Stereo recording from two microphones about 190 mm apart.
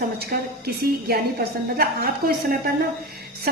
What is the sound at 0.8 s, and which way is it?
A woman's voice, 55° right (ahead or behind).